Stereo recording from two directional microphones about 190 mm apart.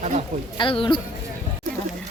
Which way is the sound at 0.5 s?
25° left (ahead or behind).